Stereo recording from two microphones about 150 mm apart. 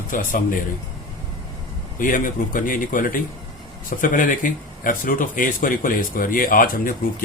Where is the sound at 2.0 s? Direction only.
65° left (ahead or behind).